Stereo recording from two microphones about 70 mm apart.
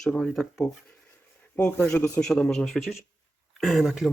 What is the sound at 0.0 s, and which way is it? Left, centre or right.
Speech, centre.